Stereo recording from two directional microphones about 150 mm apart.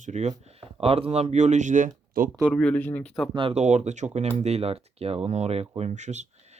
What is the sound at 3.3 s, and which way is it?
Speech, 40° right (ahead or behind).